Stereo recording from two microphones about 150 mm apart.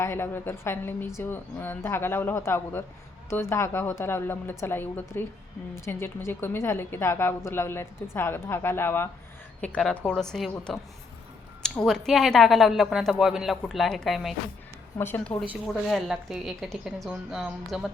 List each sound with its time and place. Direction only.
0.0 s a woman's voice: 15° left (ahead or behind); by 14.3 s centre (ahead or behind)
14.9 s a woman's voice: 15° left (ahead or behind)
15.6 s speech: centre (ahead or behind)